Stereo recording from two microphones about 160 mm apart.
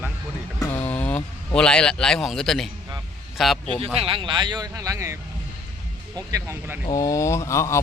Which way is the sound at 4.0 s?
35° right (ahead or behind).